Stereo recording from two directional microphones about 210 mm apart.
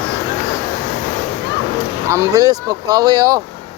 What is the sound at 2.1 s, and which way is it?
Speech, 15° right (ahead or behind).